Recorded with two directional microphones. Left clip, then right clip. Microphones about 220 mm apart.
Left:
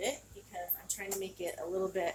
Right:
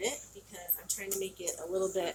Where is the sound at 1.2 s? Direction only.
25° left (ahead or behind).